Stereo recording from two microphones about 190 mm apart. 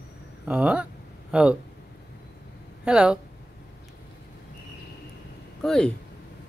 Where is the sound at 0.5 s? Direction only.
5° right (ahead or behind).